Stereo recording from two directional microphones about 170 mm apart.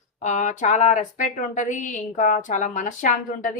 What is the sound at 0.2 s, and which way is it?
A woman's voice, 45° left (ahead or behind).